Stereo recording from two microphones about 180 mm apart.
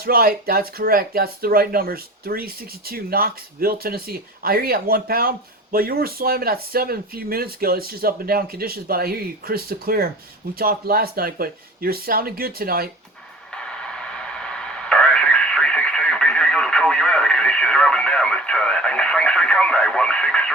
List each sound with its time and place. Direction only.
0.0 s speech: 55° right (ahead or behind)
13.5 s a sound: 5° left (ahead or behind)
14.4 s radio: 5° left (ahead or behind)